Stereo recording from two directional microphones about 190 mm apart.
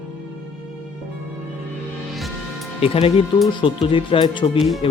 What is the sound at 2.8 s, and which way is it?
Speech, 30° left (ahead or behind).